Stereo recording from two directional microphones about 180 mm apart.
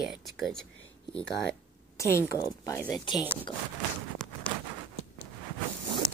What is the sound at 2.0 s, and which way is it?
Speech, 15° left (ahead or behind).